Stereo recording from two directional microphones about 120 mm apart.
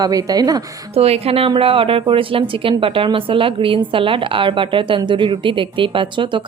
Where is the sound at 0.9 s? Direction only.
55° right (ahead or behind).